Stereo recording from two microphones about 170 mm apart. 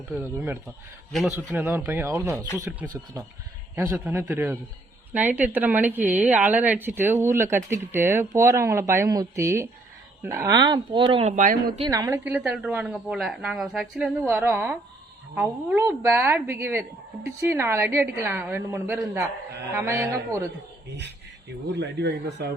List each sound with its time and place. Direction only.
0.2 s speech: 15° right (ahead or behind); by 11.7 s 50° right (ahead or behind)
11.9 s speech: 20° right (ahead or behind)
21.7 s speech: 90° right